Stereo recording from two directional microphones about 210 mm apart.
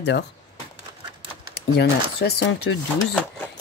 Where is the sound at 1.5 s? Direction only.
50° left (ahead or behind).